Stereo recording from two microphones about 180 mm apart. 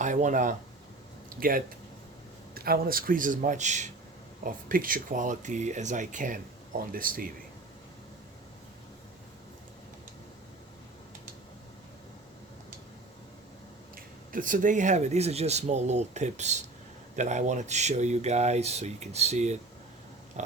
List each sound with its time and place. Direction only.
0.0 s speech: 45° right (ahead or behind)
13.9 s speech: 50° right (ahead or behind)
20.4 s pig: 40° right (ahead or behind)